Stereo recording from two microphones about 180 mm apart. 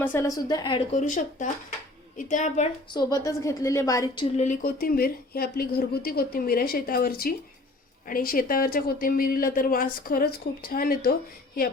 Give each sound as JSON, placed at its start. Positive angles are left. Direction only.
{"t": 0.0, "sound": "a woman's voice", "side_deg": 15}
{"t": 0.9, "sound": "speech", "side_deg": 40}
{"t": 2.9, "sound": "a woman's voice", "side_deg": 20}
{"t": 4.6, "sound": "speech", "side_deg": 55}